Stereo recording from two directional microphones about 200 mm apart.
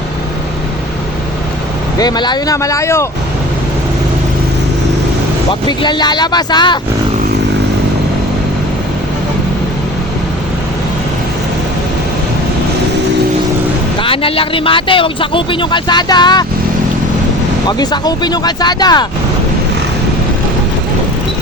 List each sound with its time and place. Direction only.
2.0 s speech: 20° left (ahead or behind)
5.5 s speech: 25° left (ahead or behind)
14.0 s speech: 25° left (ahead or behind)
17.7 s speech: 20° left (ahead or behind)